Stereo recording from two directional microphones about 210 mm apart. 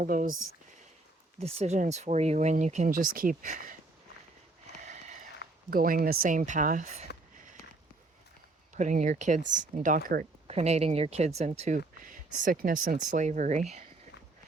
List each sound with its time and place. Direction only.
0.0 s speech: 40° right (ahead or behind)
1.4 s speech: 30° right (ahead or behind)
4.9 s a sound: 35° right (ahead or behind)
5.4 s a sound: 50° left (ahead or behind)
5.7 s speech: 45° right (ahead or behind)
8.7 s speech: 35° right (ahead or behind)
10.4 s speech: 30° right (ahead or behind)